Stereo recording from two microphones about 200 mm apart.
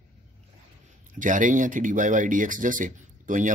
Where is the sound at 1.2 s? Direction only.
40° right (ahead or behind).